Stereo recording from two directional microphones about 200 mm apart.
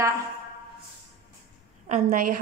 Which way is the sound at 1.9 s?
40° right (ahead or behind).